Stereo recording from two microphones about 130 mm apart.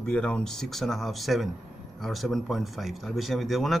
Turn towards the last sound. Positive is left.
turn(degrees=0)  # may be behind; listen again after turning